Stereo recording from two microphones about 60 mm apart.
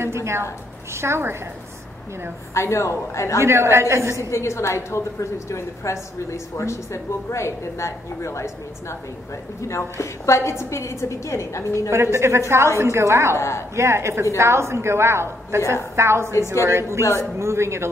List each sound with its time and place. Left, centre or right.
0.0 s a woman's voice: right
2.5 s a woman's voice: left
3.3 s a woman's voice: right
4.3 s a woman's voice: left
11.9 s a woman's voice: right
13.4 s a woman's voice: left
13.7 s a woman's voice: right